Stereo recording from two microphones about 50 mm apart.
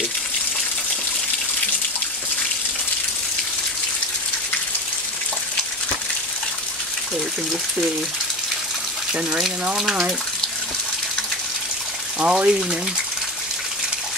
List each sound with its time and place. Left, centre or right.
12.2 s speech: right